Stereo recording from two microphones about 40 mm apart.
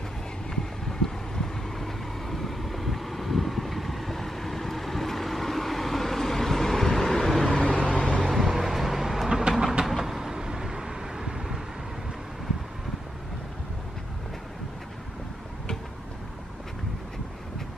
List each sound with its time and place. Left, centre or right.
1.0 s vehicle: centre
7.4 s vehicle: centre
8.2 s vehicle: centre
9.5 s train: centre
9.8 s vehicle: centre